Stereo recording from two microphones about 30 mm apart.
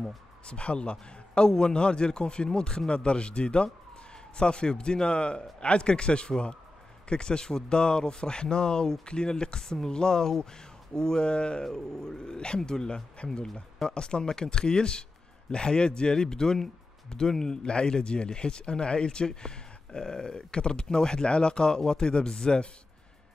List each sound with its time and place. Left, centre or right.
0.5 s a man's voice: left
11.6 s speech: centre